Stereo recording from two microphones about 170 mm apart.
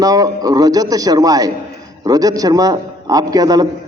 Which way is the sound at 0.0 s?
20° right (ahead or behind).